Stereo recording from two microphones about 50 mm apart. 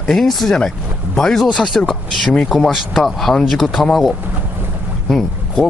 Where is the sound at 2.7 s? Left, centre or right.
Centre.